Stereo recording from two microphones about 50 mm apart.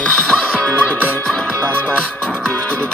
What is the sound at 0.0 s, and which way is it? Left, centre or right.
Music, left.